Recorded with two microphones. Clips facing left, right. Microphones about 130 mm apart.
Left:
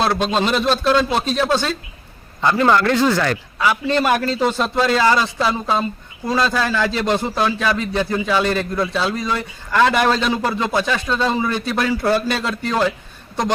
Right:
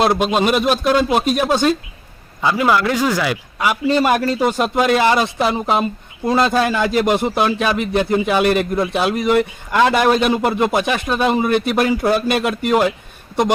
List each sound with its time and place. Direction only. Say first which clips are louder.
0.0 s a man's voice: right 3 dB; 15° right (ahead or behind)
10.3 s a man's voice: right 3 dB; 15° right (ahead or behind)